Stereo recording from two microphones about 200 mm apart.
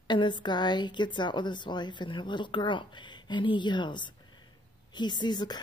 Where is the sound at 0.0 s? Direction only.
20° left (ahead or behind).